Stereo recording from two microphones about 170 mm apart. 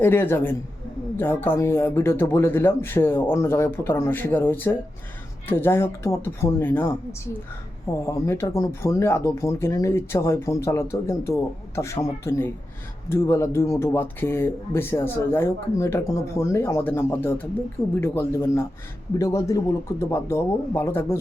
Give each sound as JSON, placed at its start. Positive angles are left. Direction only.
{"t": 0.0, "sound": "speech", "side_deg": 15}
{"t": 8.0, "sound": "speech", "side_deg": 15}